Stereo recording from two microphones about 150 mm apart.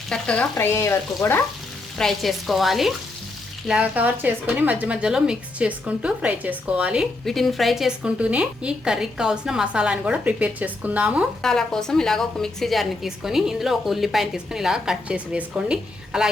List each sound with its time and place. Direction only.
0.1 s frying: 5° left (ahead or behind)
0.5 s frying: 15° left (ahead or behind)
2.0 s a woman's voice: centre (ahead or behind)
11.4 s a woman's voice: 5° left (ahead or behind)